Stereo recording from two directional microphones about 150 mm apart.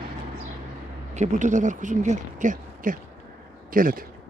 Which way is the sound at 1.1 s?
55° right (ahead or behind).